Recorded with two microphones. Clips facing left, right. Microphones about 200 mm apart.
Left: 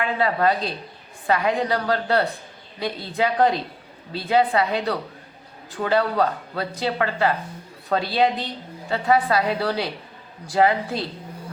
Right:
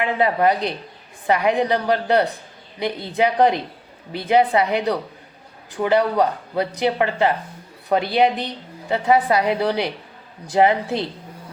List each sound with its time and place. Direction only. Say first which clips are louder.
0.0 s a woman's voice: right 3 dB; 20° right (ahead or behind)